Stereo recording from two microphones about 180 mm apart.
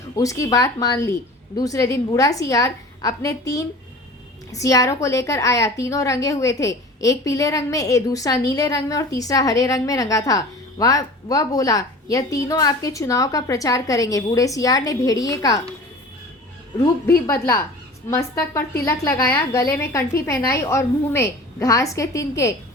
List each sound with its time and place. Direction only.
0.2 s a woman's voice: 15° left (ahead or behind)
17.1 s a woman's voice: 15° left (ahead or behind)